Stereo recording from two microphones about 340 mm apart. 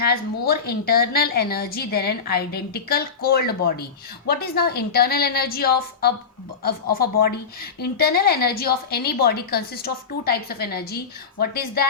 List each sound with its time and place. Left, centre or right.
0.0 s a woman's voice: left